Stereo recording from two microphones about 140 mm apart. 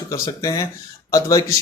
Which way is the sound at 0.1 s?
25° left (ahead or behind).